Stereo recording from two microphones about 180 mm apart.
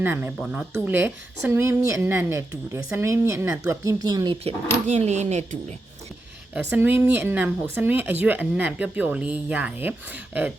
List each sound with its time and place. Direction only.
0.0 s a woman's voice: 10° right (ahead or behind)
4.4 s speech: 40° right (ahead or behind)
6.5 s a woman's voice: 10° right (ahead or behind)